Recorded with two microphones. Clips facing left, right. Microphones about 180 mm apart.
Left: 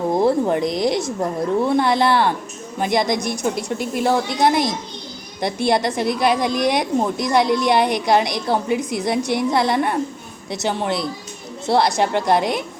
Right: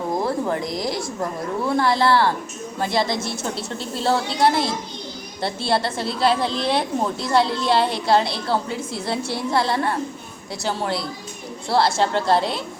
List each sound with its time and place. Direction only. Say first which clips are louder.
0.1 s a woman's voice: left 6 dB; 25° left (ahead or behind)